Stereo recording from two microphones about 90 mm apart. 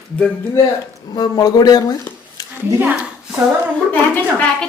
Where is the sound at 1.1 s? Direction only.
50° left (ahead or behind).